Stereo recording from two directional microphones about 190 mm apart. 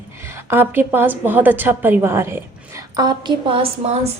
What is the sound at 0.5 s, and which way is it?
A woman's voice, 10° right (ahead or behind).